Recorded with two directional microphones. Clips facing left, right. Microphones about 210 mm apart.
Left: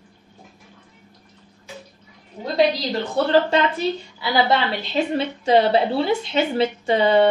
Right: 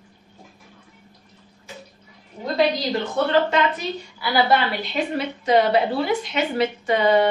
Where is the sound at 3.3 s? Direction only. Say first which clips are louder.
Left 3 dB; 30° left (ahead or behind).